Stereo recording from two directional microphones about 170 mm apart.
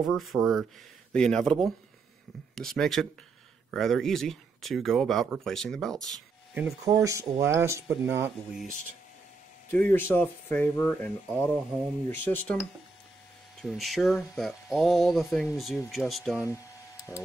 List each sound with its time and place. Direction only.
0.0 s speech: centre (ahead or behind)
6.8 s speech: 20° right (ahead or behind)
9.7 s speech: 10° left (ahead or behind)
13.6 s speech: centre (ahead or behind)
16.3 s a sound: 20° left (ahead or behind)